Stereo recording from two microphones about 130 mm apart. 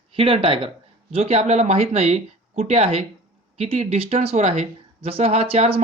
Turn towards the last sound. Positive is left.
turn(degrees=-45)  # may be behind; listen again after turning